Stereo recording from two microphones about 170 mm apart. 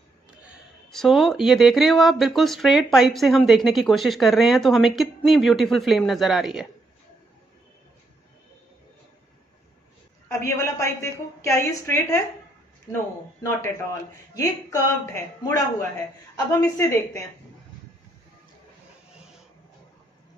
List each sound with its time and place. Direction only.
0.4 s speech: centre (ahead or behind)
10.2 s a woman's voice: 15° left (ahead or behind)
14.3 s a man's voice: 20° left (ahead or behind)